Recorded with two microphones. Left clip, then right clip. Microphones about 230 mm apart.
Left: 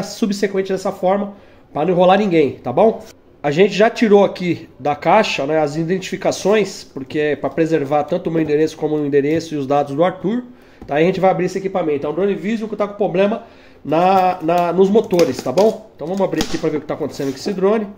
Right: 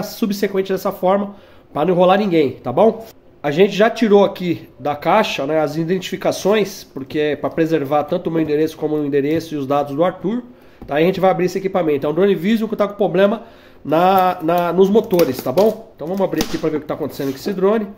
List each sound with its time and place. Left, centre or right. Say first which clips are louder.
0.0 s a man's voice: left 1 dB; centre; by 13.1 s right
13.1 s a man's voice: right 2 dB; centre